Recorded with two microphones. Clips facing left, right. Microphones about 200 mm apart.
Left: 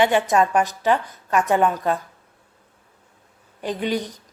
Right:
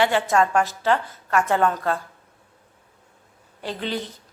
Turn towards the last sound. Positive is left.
turn(degrees=15)  # may be behind; listen again after turning